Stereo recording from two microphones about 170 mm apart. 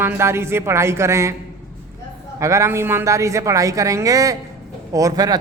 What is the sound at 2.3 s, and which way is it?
A man's voice, 15° right (ahead or behind).